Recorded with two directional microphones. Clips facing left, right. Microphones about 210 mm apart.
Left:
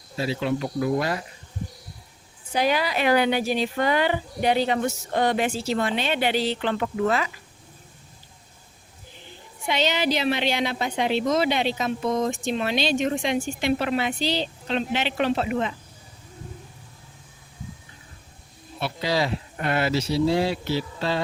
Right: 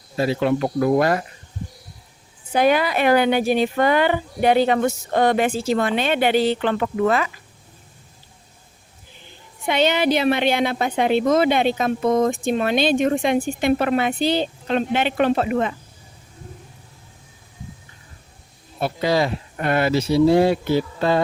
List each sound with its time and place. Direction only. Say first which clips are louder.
0.2 s speech: right 6 dB; 55° right (ahead or behind)
2.5 s a woman's voice: right 5 dB; 55° right (ahead or behind)
9.6 s a woman's voice: right 5 dB; 55° right (ahead or behind)
18.8 s a woman's voice: right 5 dB; 50° right (ahead or behind)